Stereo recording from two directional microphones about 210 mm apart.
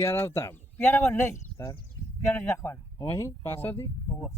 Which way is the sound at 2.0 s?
15° left (ahead or behind).